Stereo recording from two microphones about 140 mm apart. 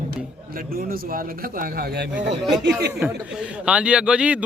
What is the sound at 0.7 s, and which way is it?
Speech, 90° right.